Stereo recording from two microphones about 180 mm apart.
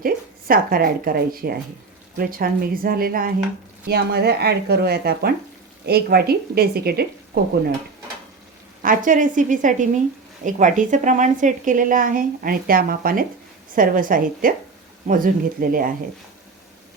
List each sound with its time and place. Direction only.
0.0 s a woman's voice: 55° right (ahead or behind)
8.8 s a woman's voice: 50° right (ahead or behind)